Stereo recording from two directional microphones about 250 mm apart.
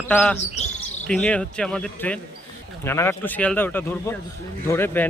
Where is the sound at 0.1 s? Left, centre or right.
Centre.